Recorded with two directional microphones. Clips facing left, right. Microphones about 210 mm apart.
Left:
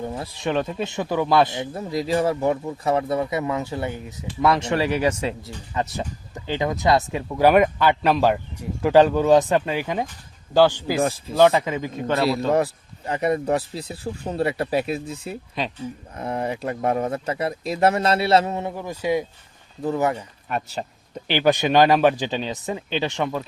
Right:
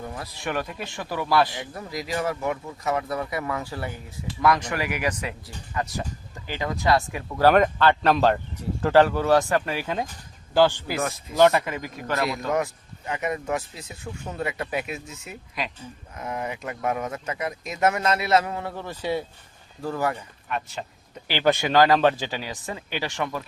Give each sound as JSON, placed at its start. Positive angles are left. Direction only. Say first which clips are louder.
{"t": 0.0, "sound": "speech", "louder": "left 5 dB", "side_deg": 25}
{"t": 11.0, "sound": "a man's voice", "louder": "left 6 dB", "side_deg": 30}
{"t": 11.3, "sound": "a man's voice", "louder": "left 2 dB", "side_deg": 15}
{"t": 18.7, "sound": "speech", "louder": "left 4 dB", "side_deg": 10}
{"t": 20.5, "sound": "a man's voice", "louder": "left 3 dB", "side_deg": 35}
{"t": 21.2, "sound": "speech", "louder": "left 3 dB", "side_deg": 15}